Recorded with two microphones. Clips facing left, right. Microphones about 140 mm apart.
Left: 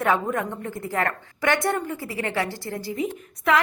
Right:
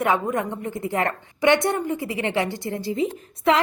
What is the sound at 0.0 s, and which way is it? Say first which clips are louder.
A woman's voice: right 1 dB; 20° right (ahead or behind).